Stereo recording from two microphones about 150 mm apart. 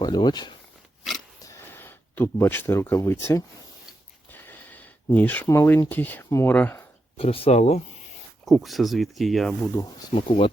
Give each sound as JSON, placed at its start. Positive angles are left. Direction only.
{"t": 0.0, "sound": "speech", "side_deg": 30}
{"t": 1.4, "sound": "a sound", "side_deg": 20}
{"t": 4.3, "sound": "speech", "side_deg": 10}
{"t": 7.2, "sound": "speech", "side_deg": 40}
{"t": 8.4, "sound": "speech", "side_deg": 0}
{"t": 10.2, "sound": "speech", "side_deg": 35}